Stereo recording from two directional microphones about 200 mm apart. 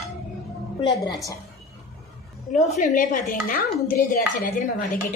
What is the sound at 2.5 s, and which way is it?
Speech, 40° left (ahead or behind).